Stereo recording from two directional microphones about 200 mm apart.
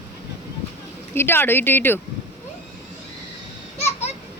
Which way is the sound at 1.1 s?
10° left (ahead or behind).